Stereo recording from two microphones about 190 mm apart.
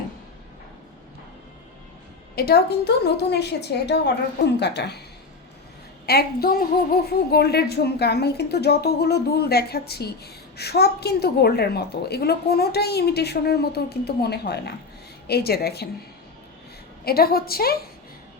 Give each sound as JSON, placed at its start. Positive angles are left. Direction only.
{"t": 2.3, "sound": "a woman's voice", "side_deg": 55}
{"t": 6.1, "sound": "a woman's voice", "side_deg": 55}
{"t": 17.1, "sound": "a woman's voice", "side_deg": 55}